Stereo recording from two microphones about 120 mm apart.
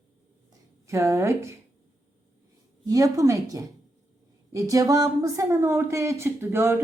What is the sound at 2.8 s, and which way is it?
Speech, 30° right (ahead or behind).